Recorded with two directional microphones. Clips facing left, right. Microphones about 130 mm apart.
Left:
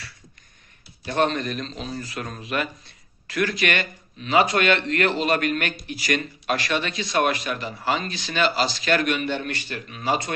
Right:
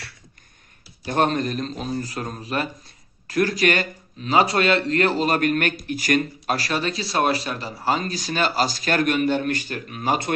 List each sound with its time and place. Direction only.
1.0 s speech: 45° right (ahead or behind)